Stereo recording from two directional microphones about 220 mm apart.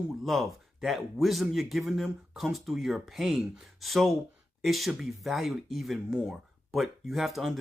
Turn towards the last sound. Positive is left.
turn(degrees=0)  # may be behind; listen again after turning